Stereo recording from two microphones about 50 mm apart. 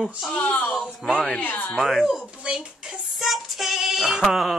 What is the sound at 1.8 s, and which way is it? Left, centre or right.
Speech, centre.